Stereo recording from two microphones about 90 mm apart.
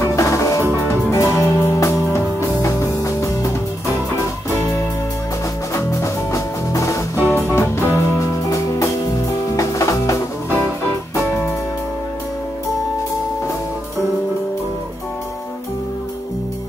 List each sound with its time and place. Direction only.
0.0 s music: 35° left (ahead or behind)
5.8 s music: 35° left (ahead or behind)
7.2 s music: 25° left (ahead or behind)